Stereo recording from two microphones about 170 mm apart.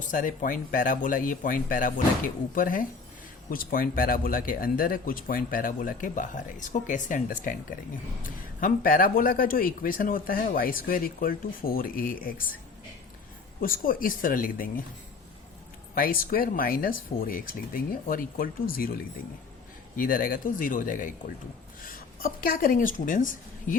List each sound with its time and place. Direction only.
0.1 s speech: 50° left (ahead or behind)
8.6 s speech: 55° left (ahead or behind)
13.6 s speech: 55° left (ahead or behind)
16.0 s speech: 60° left (ahead or behind)
20.0 s a woman's voice: 55° left (ahead or behind)